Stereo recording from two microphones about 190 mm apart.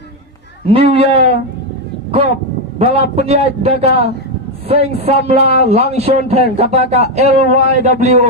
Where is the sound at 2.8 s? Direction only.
30° right (ahead or behind).